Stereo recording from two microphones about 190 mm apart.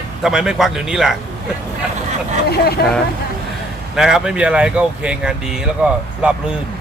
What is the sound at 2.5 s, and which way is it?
Speech, 55° left (ahead or behind).